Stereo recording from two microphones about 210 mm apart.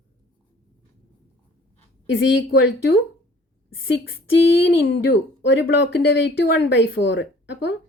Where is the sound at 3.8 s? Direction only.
65° left (ahead or behind).